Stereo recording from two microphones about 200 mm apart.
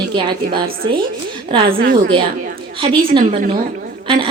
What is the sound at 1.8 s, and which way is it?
Speech, 50° right (ahead or behind).